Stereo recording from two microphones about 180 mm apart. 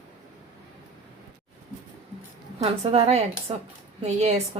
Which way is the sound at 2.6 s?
35° right (ahead or behind).